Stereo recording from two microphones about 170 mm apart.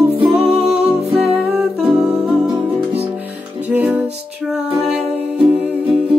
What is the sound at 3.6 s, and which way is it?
Music, 10° right (ahead or behind).